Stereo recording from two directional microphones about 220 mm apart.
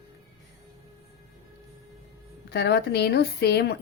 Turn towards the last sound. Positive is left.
turn(degrees=50)  # may be behind; listen again after turning